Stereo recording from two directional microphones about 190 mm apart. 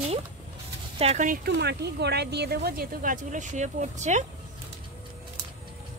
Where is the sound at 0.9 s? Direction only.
35° right (ahead or behind).